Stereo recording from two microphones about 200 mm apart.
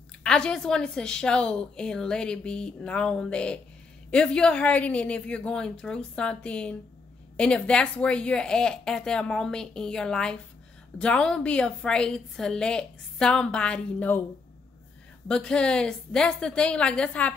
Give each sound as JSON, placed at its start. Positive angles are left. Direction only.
{"t": 0.2, "sound": "a woman's voice", "side_deg": 5}
{"t": 15.2, "sound": "a woman's voice", "side_deg": 5}